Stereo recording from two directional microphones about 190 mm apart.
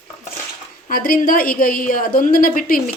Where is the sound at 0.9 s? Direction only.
50° left (ahead or behind).